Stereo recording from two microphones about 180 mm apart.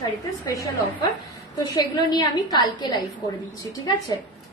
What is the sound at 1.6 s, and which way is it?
A woman's voice, 20° left (ahead or behind).